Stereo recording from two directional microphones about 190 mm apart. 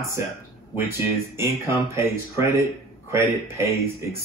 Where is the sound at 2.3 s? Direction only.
15° right (ahead or behind).